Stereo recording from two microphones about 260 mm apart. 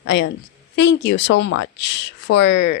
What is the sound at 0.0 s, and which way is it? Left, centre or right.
A woman's voice, left.